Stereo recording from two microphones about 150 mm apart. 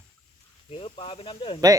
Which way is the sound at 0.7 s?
40° left (ahead or behind).